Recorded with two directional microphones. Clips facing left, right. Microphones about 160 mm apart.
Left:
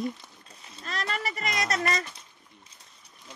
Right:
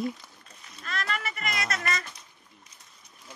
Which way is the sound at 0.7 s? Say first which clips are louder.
Even; 30° left (ahead or behind).